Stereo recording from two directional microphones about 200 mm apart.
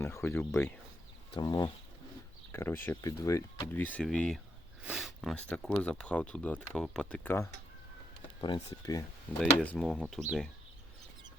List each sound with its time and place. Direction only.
0.0 s speech: 10° left (ahead or behind)
8.4 s speech: 25° left (ahead or behind)
9.4 s speech: 5° left (ahead or behind)